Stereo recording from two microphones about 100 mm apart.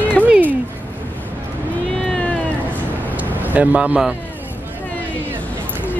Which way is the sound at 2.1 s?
10° left (ahead or behind).